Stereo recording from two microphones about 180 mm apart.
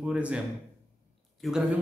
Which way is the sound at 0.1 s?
5° right (ahead or behind).